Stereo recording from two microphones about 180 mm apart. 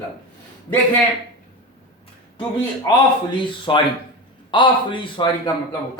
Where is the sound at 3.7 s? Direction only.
25° left (ahead or behind).